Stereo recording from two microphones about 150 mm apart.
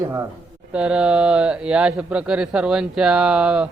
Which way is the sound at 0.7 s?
5° right (ahead or behind).